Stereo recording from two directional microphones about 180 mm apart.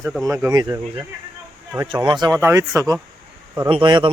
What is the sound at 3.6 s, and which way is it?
Speech, 25° right (ahead or behind).